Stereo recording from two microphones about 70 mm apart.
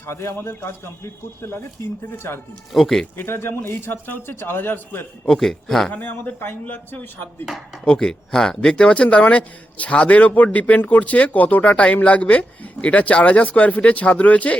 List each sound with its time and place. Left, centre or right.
0.0 s a man's voice: left
2.7 s speech: centre
3.2 s a man's voice: left
5.3 s speech: centre
5.9 s speech: left
7.9 s speech: centre